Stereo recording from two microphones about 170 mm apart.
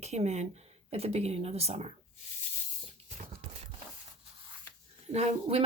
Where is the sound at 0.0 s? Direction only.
40° right (ahead or behind).